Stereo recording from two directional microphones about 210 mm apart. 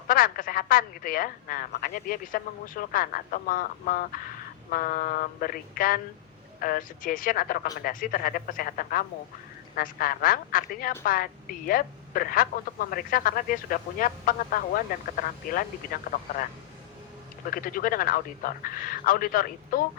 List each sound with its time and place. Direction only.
0.1 s a woman's voice: 40° left (ahead or behind)
17.5 s speech: 40° left (ahead or behind)